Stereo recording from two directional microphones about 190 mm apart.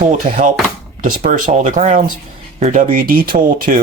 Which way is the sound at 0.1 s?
45° right (ahead or behind).